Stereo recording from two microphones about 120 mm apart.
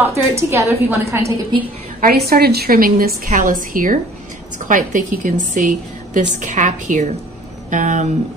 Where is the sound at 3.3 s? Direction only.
90° right.